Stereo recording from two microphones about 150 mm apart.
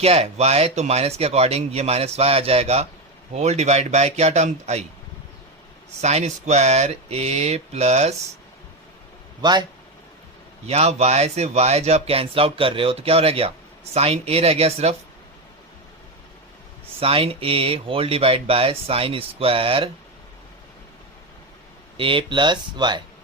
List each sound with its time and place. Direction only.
0.0 s speech: 45° right (ahead or behind)
6.0 s speech: 45° right (ahead or behind)
9.4 s speech: 30° right (ahead or behind)
10.7 s a man's voice: 45° right (ahead or behind)
17.0 s a man's voice: 40° right (ahead or behind)
21.9 s a man's voice: 35° right (ahead or behind)